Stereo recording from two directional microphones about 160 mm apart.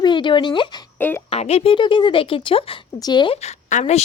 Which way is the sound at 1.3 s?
40° left (ahead or behind).